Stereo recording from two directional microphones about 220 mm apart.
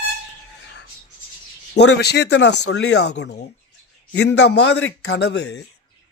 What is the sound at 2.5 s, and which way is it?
Speech, 75° left (ahead or behind).